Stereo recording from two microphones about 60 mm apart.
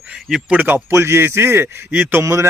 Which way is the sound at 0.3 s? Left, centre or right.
Centre.